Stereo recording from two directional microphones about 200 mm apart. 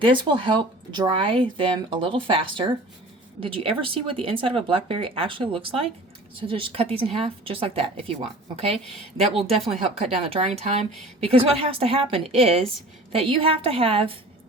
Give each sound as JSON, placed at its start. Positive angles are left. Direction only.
{"t": 0.0, "sound": "speech", "side_deg": -25}